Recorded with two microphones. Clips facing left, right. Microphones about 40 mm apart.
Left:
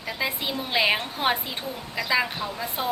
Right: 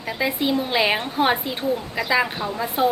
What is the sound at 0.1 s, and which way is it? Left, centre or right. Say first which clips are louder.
A woman's voice: right 6 dB; centre.